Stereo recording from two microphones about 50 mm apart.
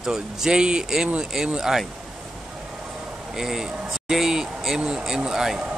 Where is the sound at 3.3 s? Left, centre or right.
Centre.